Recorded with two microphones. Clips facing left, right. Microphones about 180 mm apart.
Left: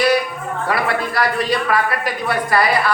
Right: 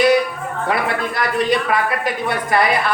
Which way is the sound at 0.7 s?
20° right (ahead or behind).